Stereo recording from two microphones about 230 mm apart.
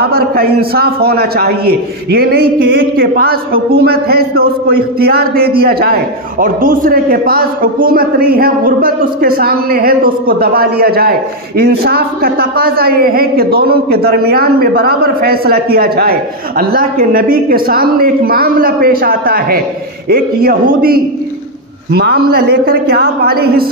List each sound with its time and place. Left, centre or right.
0.0 s a woman's voice: right